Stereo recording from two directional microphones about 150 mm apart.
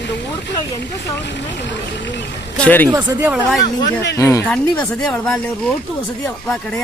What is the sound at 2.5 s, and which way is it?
Speech, 10° left (ahead or behind).